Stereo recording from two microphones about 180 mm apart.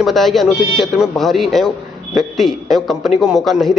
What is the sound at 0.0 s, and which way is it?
Speech, centre (ahead or behind).